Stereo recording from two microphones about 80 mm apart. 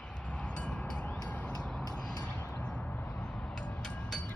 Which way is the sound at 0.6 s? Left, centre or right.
Centre.